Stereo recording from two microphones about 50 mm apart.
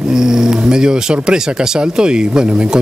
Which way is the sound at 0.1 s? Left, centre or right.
Centre.